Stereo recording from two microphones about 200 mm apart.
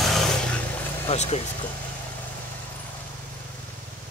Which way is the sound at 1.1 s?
30° left (ahead or behind).